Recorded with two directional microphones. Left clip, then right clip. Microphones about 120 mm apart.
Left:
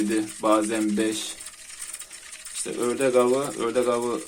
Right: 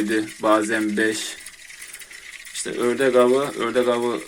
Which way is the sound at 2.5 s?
Centre (ahead or behind).